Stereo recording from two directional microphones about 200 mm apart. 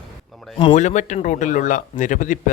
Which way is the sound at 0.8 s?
40° left (ahead or behind).